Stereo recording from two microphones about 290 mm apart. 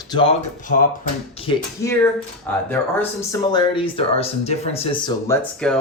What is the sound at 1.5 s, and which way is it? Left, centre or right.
Speech, centre.